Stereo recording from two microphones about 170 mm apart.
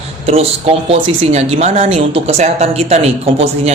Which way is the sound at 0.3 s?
35° right (ahead or behind).